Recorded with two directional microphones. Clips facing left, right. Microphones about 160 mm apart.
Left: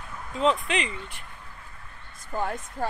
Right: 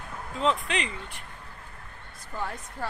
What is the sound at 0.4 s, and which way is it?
Speech, 5° left (ahead or behind).